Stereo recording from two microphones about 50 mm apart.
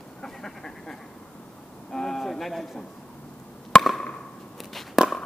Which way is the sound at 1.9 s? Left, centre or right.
Centre.